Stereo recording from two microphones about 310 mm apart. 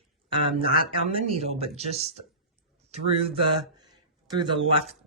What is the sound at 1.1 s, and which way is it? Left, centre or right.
Speech, centre.